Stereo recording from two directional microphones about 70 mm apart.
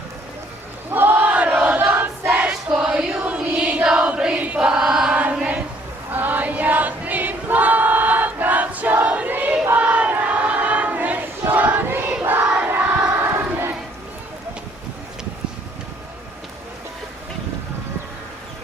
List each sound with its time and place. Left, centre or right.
0.9 s a sound: right
1.5 s crowd: centre
1.9 s choir: right
2.4 s choir: centre
3.2 s chant: centre
3.8 s choir: centre
12.2 s crowd: right